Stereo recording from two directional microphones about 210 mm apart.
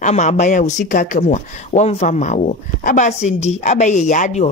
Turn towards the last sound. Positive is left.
turn(degrees=35)  # may be behind; listen again after turning